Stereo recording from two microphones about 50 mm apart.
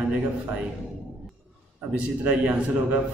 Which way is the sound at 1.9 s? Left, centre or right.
Right.